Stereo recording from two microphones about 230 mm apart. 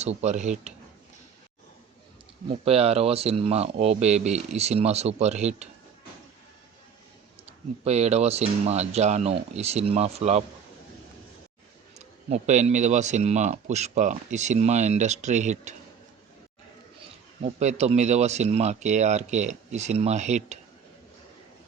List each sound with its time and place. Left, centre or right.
0.0 s speech: right
2.5 s speech: right
7.9 s speech: right
11.9 s speech: right
17.4 s speech: right